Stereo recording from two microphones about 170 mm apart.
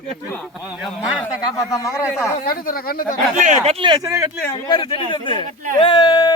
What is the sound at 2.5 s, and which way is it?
Speech, 55° left (ahead or behind).